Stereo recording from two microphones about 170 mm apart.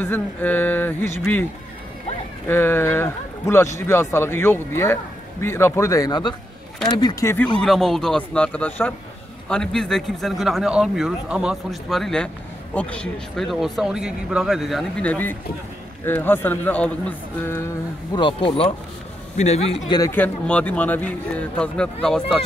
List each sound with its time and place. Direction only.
0.0 s a man's voice: 10° left (ahead or behind)
2.4 s a man's voice: 10° left (ahead or behind)
18.1 s a man's voice: 30° left (ahead or behind)
19.9 s a man's voice: 15° left (ahead or behind)